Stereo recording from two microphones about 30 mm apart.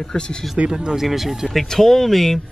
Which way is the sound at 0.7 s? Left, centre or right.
Right.